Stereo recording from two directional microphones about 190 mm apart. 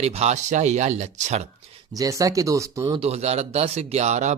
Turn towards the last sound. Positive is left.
turn(degrees=-35)  # may be behind; listen again after turning